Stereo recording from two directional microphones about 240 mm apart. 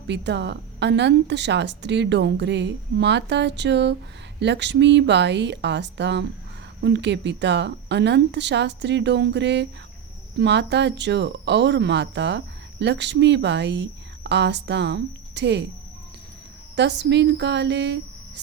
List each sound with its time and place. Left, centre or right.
0.1 s a woman's voice: right
16.7 s a woman's voice: right